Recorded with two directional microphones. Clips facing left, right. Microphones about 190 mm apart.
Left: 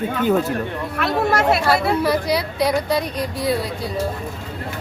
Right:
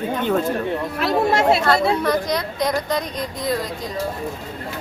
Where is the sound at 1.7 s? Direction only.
10° left (ahead or behind).